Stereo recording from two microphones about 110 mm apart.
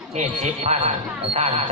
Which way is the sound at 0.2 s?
90° right.